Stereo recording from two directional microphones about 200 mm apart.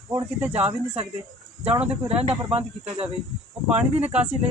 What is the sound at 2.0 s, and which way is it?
Speech, 30° right (ahead or behind).